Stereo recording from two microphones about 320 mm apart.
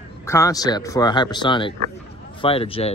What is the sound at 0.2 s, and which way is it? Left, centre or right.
Speech, centre.